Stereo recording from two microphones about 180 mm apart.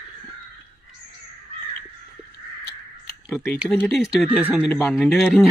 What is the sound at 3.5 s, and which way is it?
Speech, 5° right (ahead or behind).